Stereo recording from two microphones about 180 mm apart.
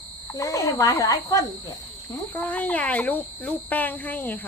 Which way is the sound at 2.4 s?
10° left (ahead or behind).